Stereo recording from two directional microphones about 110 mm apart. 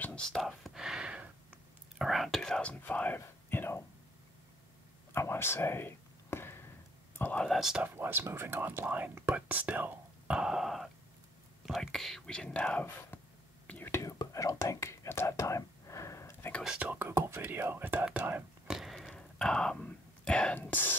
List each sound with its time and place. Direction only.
0.0 s whispering: 10° left (ahead or behind)
5.1 s a sound: 20° left (ahead or behind)
7.4 s a sound: centre (ahead or behind)
7.8 s speech: 20° right (ahead or behind); by 12.8 s 10° left (ahead or behind)
13.7 s whispering: 15° left (ahead or behind)
13.9 s whispering: 30° left (ahead or behind)
16.6 s speech: 10° right (ahead or behind)
18.7 s whispering: centre (ahead or behind); by 20.9 s 15° left (ahead or behind)